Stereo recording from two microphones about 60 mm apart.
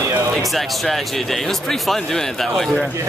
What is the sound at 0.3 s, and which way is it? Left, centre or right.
Speech, centre.